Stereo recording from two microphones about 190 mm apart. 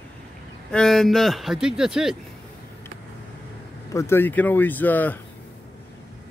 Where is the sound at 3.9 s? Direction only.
10° left (ahead or behind).